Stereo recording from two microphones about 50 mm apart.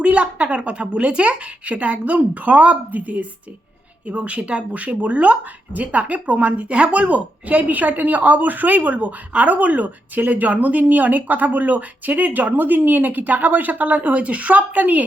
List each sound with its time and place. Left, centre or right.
0.0 s a woman's voice: right